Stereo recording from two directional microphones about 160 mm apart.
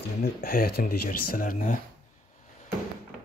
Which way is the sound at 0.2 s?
65° left (ahead or behind).